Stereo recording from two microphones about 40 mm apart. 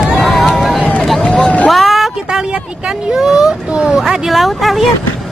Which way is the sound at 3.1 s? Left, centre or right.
Centre.